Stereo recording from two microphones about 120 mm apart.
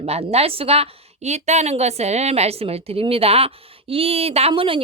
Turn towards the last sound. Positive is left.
turn(degrees=-50)  # may be behind; listen again after turning